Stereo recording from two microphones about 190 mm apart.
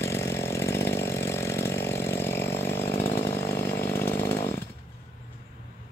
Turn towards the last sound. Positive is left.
turn(degrees=15)  # may be behind; listen again after turning